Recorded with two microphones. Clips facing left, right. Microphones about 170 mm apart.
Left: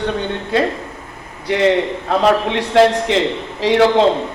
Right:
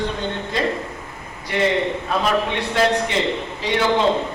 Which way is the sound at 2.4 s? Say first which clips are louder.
Left 7 dB; 90° left.